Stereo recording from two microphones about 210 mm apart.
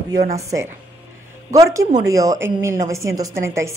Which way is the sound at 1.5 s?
15° right (ahead or behind).